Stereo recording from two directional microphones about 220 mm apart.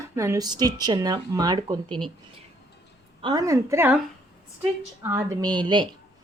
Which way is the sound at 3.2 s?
15° right (ahead or behind).